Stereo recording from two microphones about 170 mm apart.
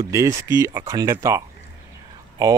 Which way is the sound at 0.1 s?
15° right (ahead or behind).